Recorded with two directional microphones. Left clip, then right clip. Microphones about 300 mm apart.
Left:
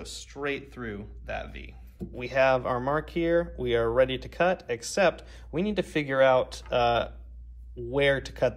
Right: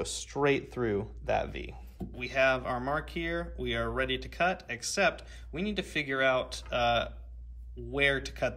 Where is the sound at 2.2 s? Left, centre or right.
Centre.